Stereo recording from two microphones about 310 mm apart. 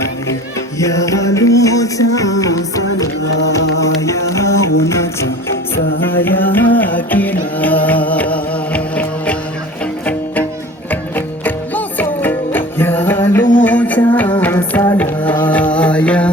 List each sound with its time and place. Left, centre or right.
0.8 s music: centre
3.2 s music: left
3.8 s music: centre
6.0 s music: centre
11.1 s music: centre